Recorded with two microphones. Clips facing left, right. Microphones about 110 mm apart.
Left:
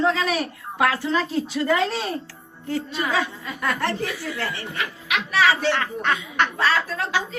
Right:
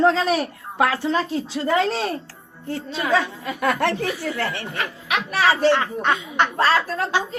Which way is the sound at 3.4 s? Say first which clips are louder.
Right 4 dB; 60° right (ahead or behind).